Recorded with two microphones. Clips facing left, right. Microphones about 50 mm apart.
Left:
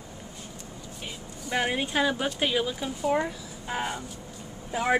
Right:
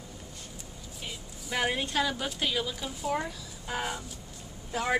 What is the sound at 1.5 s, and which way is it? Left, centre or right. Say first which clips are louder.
A woman's voice: left 2 dB; centre.